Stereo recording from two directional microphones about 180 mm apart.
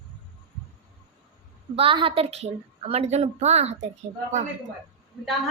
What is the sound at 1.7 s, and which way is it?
A woman's voice, 30° right (ahead or behind).